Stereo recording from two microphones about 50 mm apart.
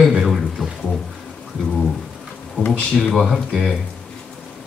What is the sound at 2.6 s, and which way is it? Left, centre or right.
Speech, left.